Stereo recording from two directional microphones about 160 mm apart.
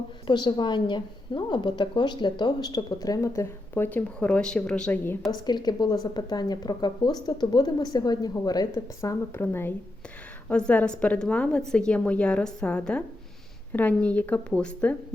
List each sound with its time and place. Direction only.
0.3 s a woman's voice: 30° left (ahead or behind); by 5.3 s 10° left (ahead or behind)
5.3 s a woman's voice: 25° left (ahead or behind); by 14.9 s 5° left (ahead or behind)